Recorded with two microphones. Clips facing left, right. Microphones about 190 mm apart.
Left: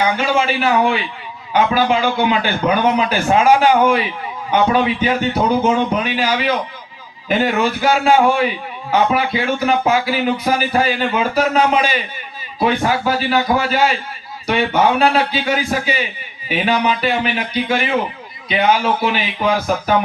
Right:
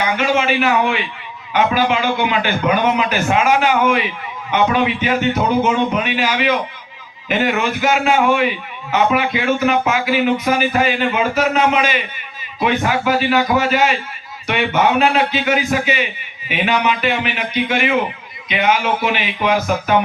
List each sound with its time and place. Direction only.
0.2 s speech: 30° left (ahead or behind)